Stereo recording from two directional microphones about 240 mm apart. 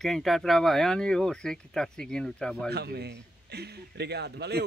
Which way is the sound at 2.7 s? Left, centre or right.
Right.